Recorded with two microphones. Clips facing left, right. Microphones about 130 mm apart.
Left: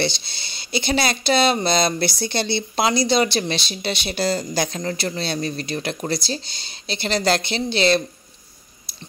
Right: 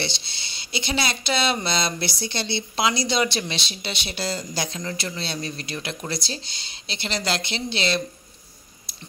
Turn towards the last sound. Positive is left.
turn(degrees=40)  # may be behind; listen again after turning